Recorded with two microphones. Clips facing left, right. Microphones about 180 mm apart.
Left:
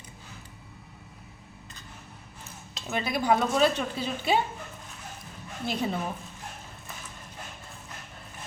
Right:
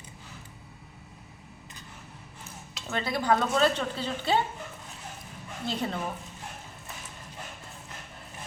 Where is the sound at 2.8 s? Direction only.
10° left (ahead or behind).